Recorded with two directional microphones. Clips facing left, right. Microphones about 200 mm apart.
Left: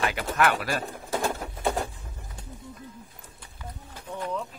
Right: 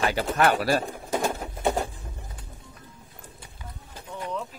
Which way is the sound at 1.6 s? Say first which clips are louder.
Right 2 dB; 20° right (ahead or behind).